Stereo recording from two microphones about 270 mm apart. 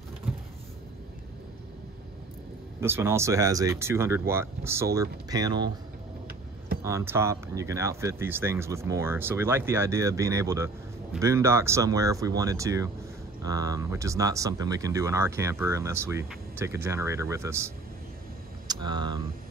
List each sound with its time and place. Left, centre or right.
2.8 s speech: centre
6.8 s speech: centre